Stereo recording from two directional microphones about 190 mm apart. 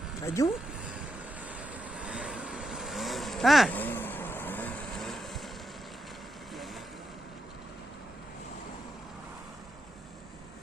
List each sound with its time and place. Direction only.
0.4 s speech: 15° left (ahead or behind)
2.0 s vehicle: 5° right (ahead or behind)